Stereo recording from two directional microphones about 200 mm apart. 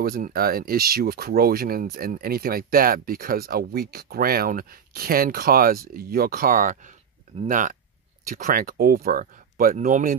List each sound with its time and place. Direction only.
0.0 s speech: 45° right (ahead or behind)